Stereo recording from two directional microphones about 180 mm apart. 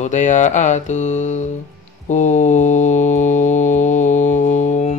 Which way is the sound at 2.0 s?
40° left (ahead or behind).